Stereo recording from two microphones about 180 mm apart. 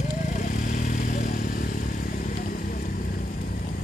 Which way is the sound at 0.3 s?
45° left (ahead or behind).